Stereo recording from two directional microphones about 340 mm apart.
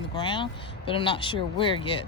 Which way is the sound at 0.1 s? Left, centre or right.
Centre.